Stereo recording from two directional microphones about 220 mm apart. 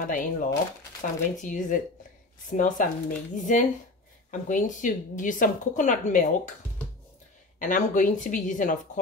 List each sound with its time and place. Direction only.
0.0 s speech: 40° left (ahead or behind)
7.5 s speech: 35° left (ahead or behind)